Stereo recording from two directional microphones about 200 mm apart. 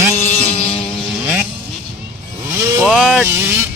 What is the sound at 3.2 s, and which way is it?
Vehicle, 10° right (ahead or behind).